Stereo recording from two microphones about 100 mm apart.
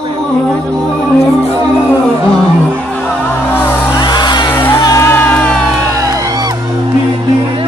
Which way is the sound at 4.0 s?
50° left (ahead or behind).